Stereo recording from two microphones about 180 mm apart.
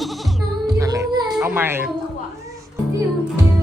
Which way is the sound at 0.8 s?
20° right (ahead or behind).